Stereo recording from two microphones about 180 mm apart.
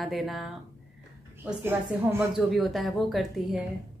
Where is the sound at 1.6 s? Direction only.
10° right (ahead or behind).